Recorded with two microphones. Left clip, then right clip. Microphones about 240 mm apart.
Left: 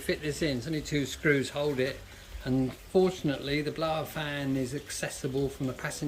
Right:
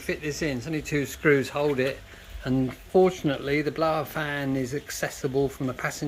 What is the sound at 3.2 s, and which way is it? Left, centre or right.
Speech, centre.